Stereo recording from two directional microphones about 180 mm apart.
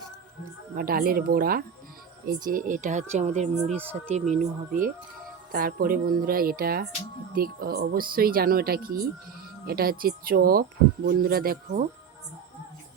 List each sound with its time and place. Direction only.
0.8 s speech: 55° right (ahead or behind)